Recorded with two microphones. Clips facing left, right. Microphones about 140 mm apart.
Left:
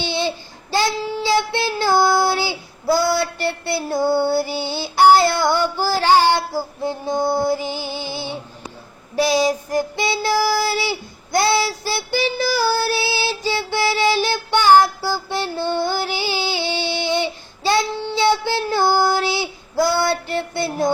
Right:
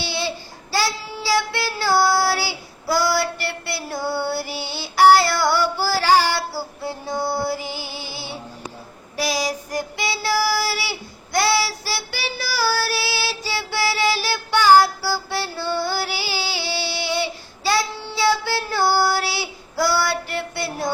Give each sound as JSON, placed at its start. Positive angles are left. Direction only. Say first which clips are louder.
{"t": 0.0, "sound": "child singing", "louder": "left 4 dB", "side_deg": 20}